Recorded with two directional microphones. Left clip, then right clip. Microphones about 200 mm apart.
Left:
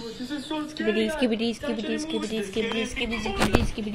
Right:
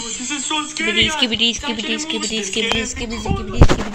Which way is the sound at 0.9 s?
35° left (ahead or behind).